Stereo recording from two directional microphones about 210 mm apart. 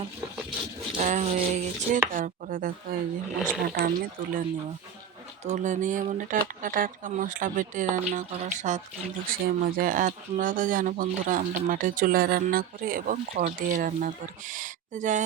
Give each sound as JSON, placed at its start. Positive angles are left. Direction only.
{"t": 0.9, "sound": "speech", "side_deg": -35}
{"t": 3.3, "sound": "speech", "side_deg": -5}
{"t": 3.6, "sound": "speech", "side_deg": -40}
{"t": 5.5, "sound": "speech", "side_deg": -35}